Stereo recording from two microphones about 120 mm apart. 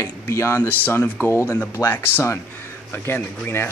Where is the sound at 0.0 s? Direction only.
20° left (ahead or behind).